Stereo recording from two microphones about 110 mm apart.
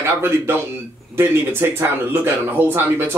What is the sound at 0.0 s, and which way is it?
Speech, 20° right (ahead or behind).